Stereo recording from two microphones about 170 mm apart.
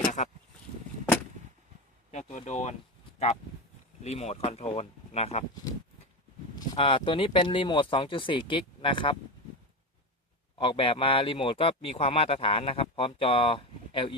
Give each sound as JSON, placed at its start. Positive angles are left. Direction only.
{"t": 0.2, "sound": "speech", "side_deg": 45}
{"t": 2.1, "sound": "speech", "side_deg": 45}
{"t": 4.0, "sound": "speech", "side_deg": 40}
{"t": 6.6, "sound": "speech", "side_deg": 30}
{"t": 10.6, "sound": "speech", "side_deg": 30}